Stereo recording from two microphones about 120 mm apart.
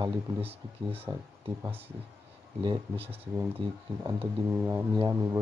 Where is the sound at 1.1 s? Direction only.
35° right (ahead or behind).